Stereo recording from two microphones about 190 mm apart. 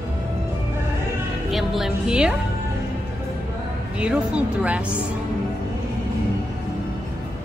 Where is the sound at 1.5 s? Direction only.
Centre (ahead or behind).